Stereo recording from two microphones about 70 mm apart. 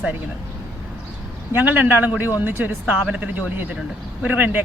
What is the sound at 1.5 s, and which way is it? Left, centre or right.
Speech, right.